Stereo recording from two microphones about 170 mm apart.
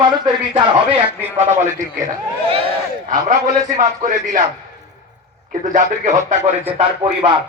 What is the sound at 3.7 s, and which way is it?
Speech, 50° right (ahead or behind).